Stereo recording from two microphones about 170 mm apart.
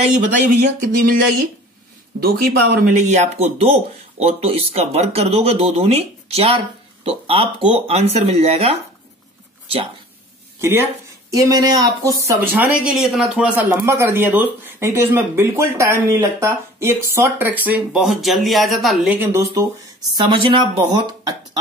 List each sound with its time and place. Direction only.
0.0 s speech: 45° right (ahead or behind)
2.1 s speech: 60° right (ahead or behind); by 8.7 s 35° right (ahead or behind)
10.6 s speech: 15° right (ahead or behind)
19.1 s speech: 15° right (ahead or behind)
20.2 s speech: 30° right (ahead or behind)